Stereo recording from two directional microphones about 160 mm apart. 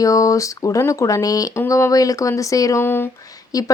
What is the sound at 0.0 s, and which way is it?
Speech, 20° left (ahead or behind).